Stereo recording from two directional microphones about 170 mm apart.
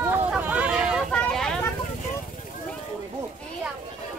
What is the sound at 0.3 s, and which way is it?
Vehicle, 10° right (ahead or behind).